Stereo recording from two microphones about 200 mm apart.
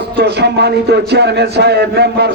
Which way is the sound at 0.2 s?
55° right (ahead or behind).